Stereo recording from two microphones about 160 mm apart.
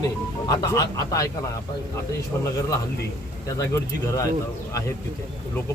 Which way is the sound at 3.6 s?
20° left (ahead or behind).